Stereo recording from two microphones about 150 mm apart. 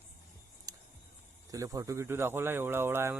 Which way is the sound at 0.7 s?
25° right (ahead or behind).